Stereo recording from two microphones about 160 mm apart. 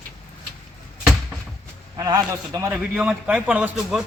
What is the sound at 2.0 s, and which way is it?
Speech, 20° right (ahead or behind).